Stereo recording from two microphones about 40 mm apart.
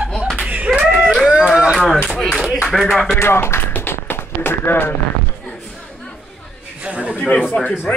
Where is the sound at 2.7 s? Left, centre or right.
Centre.